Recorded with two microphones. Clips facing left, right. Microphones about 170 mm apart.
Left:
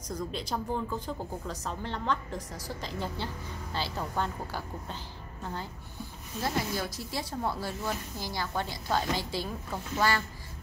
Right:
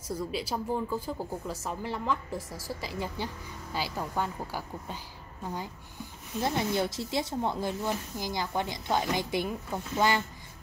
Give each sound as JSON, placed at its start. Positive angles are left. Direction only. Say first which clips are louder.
{"t": 0.1, "sound": "a woman's voice", "louder": "right 2 dB", "side_deg": -5}
{"t": 6.4, "sound": "speech", "louder": "right 3 dB", "side_deg": -25}